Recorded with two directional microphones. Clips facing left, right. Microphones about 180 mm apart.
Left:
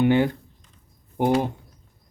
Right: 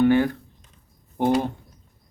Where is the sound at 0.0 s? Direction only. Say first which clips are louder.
Right 1 dB; 20° left (ahead or behind).